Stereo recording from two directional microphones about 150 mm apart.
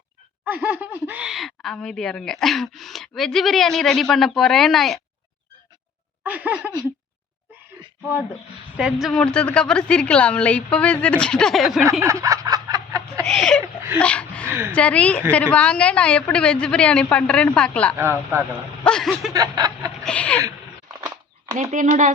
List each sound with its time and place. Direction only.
0.4 s speech: 10° right (ahead or behind)
6.2 s a sound: 10° right (ahead or behind)
8.7 s a woman's voice: 5° right (ahead or behind)
12.0 s a sound: 20° right (ahead or behind)
13.2 s speech: 5° left (ahead or behind)
14.0 s a sound: 10° left (ahead or behind)
14.4 s a sound: 15° right (ahead or behind)
14.8 s a woman's voice: 10° left (ahead or behind)
17.9 s snicker: 20° right (ahead or behind)
18.9 s speech: 5° left (ahead or behind)
19.3 s snicker: 25° right (ahead or behind)
20.1 s a woman's voice: 10° left (ahead or behind)
21.5 s speech: 55° right (ahead or behind)